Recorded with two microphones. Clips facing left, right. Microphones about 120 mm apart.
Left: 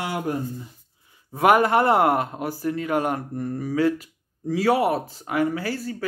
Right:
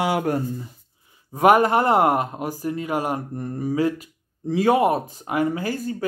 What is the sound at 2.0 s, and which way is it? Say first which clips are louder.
Speech: right 1 dB; 15° right (ahead or behind).